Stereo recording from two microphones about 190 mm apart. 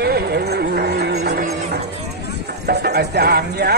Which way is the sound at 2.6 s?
60° right (ahead or behind).